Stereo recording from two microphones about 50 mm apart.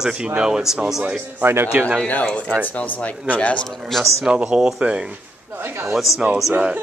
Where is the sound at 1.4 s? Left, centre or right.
Right.